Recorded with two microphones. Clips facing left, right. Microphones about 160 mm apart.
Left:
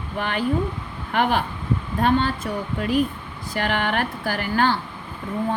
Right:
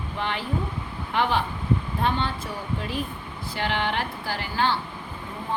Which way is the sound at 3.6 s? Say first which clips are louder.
Left 3 dB; 50° left (ahead or behind).